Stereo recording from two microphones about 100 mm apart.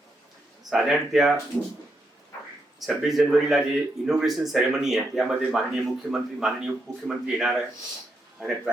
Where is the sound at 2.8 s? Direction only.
Centre (ahead or behind).